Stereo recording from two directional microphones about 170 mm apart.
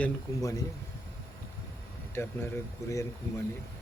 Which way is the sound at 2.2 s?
15° left (ahead or behind).